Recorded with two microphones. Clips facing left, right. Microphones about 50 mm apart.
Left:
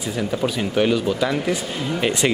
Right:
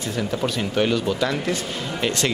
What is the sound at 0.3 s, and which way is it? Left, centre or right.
Speech, centre.